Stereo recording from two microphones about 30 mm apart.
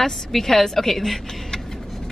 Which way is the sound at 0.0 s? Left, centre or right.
Centre.